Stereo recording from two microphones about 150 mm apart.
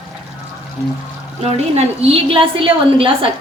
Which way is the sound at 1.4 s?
45° right (ahead or behind).